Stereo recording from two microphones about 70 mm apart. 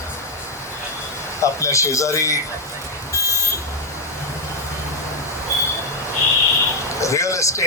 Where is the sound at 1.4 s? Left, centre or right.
Left.